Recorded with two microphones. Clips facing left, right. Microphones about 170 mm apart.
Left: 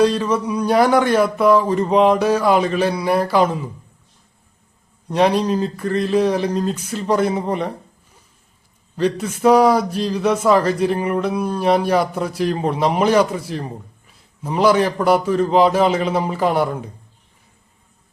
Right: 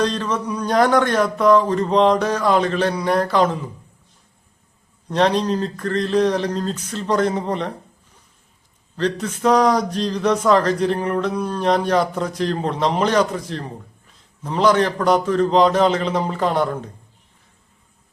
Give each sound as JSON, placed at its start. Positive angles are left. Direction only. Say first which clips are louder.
{"t": 0.0, "sound": "speech", "louder": "left 5 dB", "side_deg": 10}
{"t": 5.0, "sound": "speech", "louder": "left 2 dB", "side_deg": 10}
{"t": 9.0, "sound": "speech", "louder": "left 2 dB", "side_deg": 10}